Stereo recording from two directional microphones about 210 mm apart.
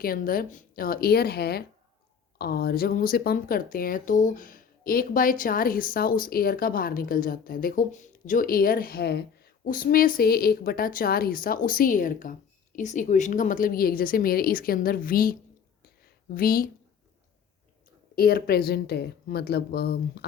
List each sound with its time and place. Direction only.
0.0 s speech: 45° left (ahead or behind)
18.1 s speech: 45° left (ahead or behind)